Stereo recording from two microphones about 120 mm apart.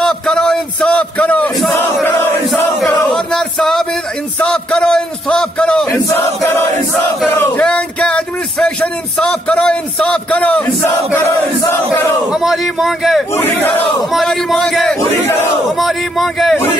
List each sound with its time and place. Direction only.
0.0 s a sound: 5° left (ahead or behind)
2.0 s chant: 15° left (ahead or behind)
2.9 s a sound: 10° left (ahead or behind)
6.0 s battle cry: 20° left (ahead or behind)
7.2 s a sound: 15° left (ahead or behind)
9.2 s a man's voice: 10° left (ahead or behind)
11.1 s crowd: 25° left (ahead or behind)
12.3 s a man's voice: 5° right (ahead or behind)
13.4 s a man's voice: 15° left (ahead or behind)
14.1 s a man's voice: centre (ahead or behind)